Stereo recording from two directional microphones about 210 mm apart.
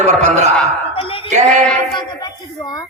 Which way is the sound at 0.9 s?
25° left (ahead or behind).